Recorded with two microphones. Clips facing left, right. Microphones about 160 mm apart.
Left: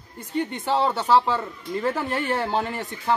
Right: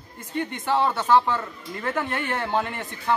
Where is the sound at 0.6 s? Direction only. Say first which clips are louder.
Right 1 dB; 25° left (ahead or behind).